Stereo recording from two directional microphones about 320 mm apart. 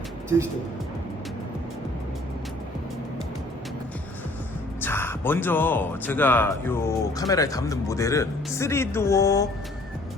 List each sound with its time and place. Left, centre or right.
4.8 s speech: centre